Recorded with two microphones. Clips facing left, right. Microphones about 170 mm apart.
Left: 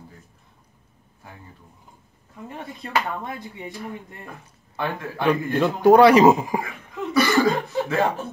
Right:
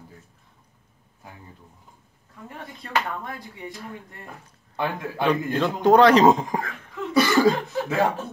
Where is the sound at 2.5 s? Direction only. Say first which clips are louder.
Left 2 dB; 20° left (ahead or behind).